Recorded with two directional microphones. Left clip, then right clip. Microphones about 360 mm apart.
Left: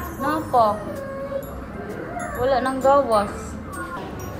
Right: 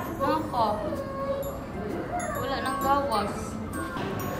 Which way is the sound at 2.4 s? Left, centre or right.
Centre.